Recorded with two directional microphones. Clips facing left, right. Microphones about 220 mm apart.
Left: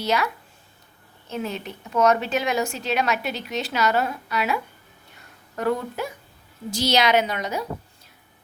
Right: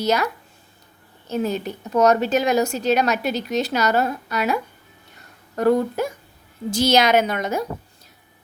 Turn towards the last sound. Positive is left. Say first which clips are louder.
# right 3 dB
turn(degrees=-50)  # may be behind; listen again after turning